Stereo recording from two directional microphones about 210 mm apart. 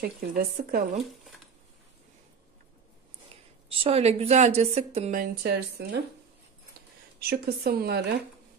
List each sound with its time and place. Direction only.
0.0 s a woman's voice: 50° right (ahead or behind)
3.6 s a woman's voice: 25° right (ahead or behind); by 6.0 s 50° right (ahead or behind)
7.2 s a woman's voice: 50° right (ahead or behind)